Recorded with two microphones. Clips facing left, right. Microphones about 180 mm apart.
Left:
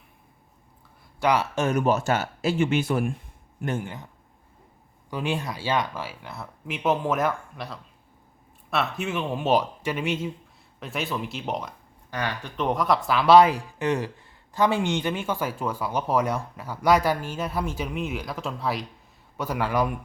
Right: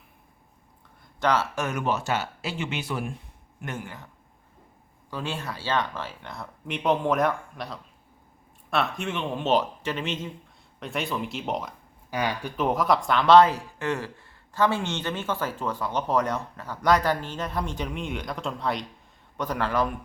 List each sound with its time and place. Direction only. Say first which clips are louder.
1.2 s speech: left 1 dB; 10° left (ahead or behind)
1.5 s speech: left 5 dB; 30° left (ahead or behind)
1.8 s speech: left 4 dB; 45° left (ahead or behind)
3.8 s speech: left 4 dB; 20° left (ahead or behind)
5.1 s speech: left 4 dB; 15° left (ahead or behind); by 11.7 s centre (ahead or behind)
12.1 s speech: right 2 dB; 10° right (ahead or behind); by 19.9 s 10° left (ahead or behind)